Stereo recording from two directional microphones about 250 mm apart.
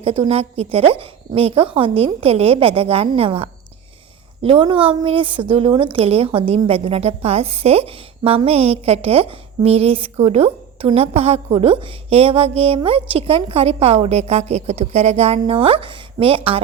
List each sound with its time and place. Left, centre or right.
0.0 s a woman's voice: right